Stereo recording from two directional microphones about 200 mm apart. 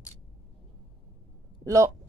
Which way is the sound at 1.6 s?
15° right (ahead or behind).